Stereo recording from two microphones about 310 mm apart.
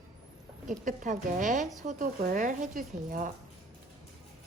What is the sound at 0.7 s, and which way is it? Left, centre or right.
Speech, right.